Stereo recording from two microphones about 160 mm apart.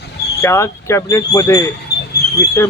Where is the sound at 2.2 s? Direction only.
80° left.